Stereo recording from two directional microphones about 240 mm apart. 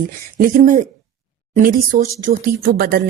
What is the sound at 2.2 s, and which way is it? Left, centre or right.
Speech, right.